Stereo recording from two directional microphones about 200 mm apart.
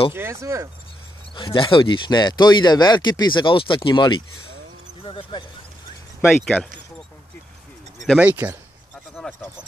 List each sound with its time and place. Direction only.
0.1 s speech: 15° right (ahead or behind)
1.3 s speech: 25° left (ahead or behind)
6.4 s speech: centre (ahead or behind)
8.0 s speech: 5° right (ahead or behind)
9.1 s a sound: 5° left (ahead or behind)